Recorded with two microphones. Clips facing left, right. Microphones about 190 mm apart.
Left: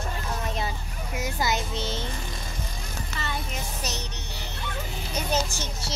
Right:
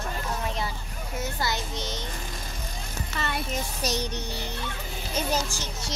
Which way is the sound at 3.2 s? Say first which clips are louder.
Right 4 dB; 55° right (ahead or behind).